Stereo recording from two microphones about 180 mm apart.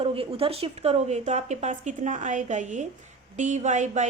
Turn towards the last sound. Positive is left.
turn(degrees=-40)  # may be behind; listen again after turning